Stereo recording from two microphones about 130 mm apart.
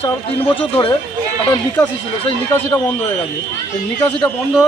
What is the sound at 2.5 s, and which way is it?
Speech, 15° left (ahead or behind).